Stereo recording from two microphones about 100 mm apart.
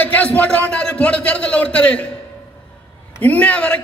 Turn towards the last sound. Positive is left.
turn(degrees=15)  # may be behind; listen again after turning